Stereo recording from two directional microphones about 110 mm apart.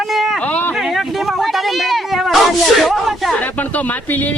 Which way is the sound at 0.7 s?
Centre (ahead or behind).